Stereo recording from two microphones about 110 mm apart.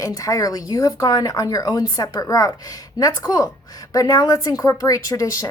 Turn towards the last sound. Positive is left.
turn(degrees=35)  # may be behind; listen again after turning